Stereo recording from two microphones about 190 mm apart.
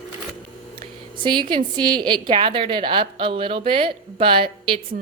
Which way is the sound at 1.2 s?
25° right (ahead or behind).